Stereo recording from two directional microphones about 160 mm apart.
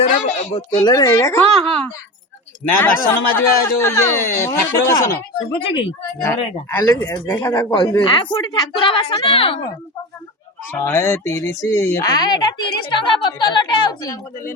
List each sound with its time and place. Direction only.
0.1 s speech: 30° left (ahead or behind)
2.7 s a man's voice: 10° left (ahead or behind)
5.5 s speech: 30° left (ahead or behind)
6.2 s a man's voice: 15° left (ahead or behind); by 9.6 s 35° left (ahead or behind)
10.7 s speech: 15° left (ahead or behind)